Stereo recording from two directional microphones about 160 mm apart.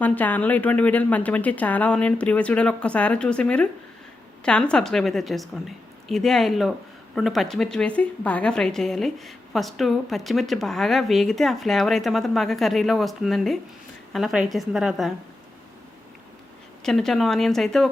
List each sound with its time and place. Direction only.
0.0 s a woman's voice: 10° left (ahead or behind)
16.8 s a woman's voice: 5° left (ahead or behind)